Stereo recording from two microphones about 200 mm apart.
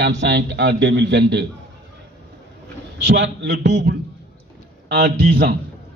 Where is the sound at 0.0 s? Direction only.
60° right (ahead or behind).